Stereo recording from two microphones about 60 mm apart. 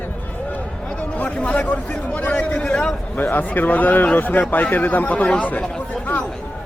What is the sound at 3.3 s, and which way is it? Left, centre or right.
A man's voice, left.